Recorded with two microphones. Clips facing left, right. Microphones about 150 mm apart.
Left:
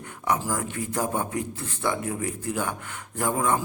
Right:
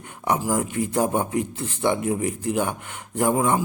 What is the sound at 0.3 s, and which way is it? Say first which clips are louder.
A man's voice: right 5 dB; 20° right (ahead or behind).